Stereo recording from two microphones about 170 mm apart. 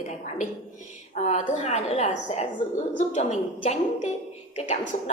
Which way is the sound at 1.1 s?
45° left (ahead or behind).